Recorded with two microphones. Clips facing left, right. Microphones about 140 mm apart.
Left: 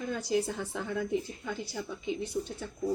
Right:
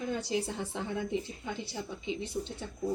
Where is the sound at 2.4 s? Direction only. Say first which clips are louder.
Left 2 dB; 40° right (ahead or behind).